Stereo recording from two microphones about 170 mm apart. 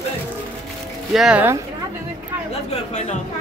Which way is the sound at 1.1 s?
5° right (ahead or behind).